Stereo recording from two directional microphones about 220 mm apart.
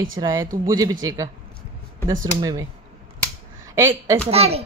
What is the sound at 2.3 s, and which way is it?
Speech, 15° right (ahead or behind).